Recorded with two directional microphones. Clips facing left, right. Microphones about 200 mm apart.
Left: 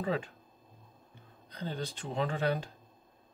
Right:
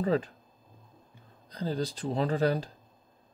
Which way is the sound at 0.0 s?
35° right (ahead or behind).